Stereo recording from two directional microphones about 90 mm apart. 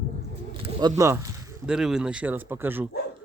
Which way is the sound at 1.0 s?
35° right (ahead or behind).